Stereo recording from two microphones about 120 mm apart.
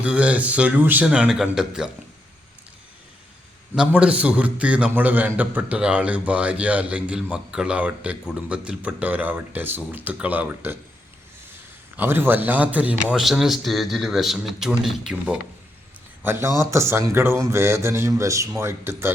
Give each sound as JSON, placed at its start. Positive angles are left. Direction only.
{"t": 0.0, "sound": "a man's voice", "side_deg": -10}
{"t": 3.8, "sound": "a man's voice", "side_deg": -10}
{"t": 11.9, "sound": "a man's voice", "side_deg": -20}
{"t": 16.2, "sound": "a man's voice", "side_deg": -20}